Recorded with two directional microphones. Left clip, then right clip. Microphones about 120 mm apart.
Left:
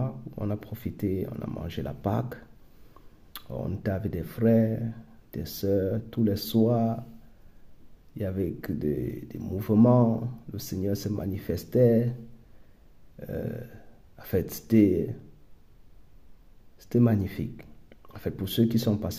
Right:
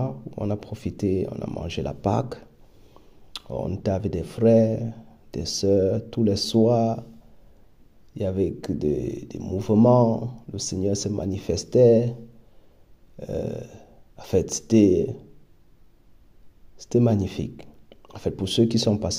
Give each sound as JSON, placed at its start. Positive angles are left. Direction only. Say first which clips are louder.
{"t": 0.0, "sound": "speech", "louder": "right 5 dB", "side_deg": -20}
{"t": 3.3, "sound": "speech", "louder": "right 6 dB", "side_deg": -15}
{"t": 8.1, "sound": "speech", "louder": "right 6 dB", "side_deg": -20}
{"t": 13.2, "sound": "speech", "louder": "right 6 dB", "side_deg": -20}
{"t": 16.7, "sound": "speech", "louder": "right 4 dB", "side_deg": -15}